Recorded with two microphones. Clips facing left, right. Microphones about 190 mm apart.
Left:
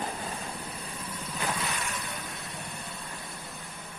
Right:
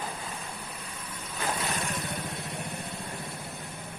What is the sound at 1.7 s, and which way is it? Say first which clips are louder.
Vehicle: right 3 dB; 40° right (ahead or behind).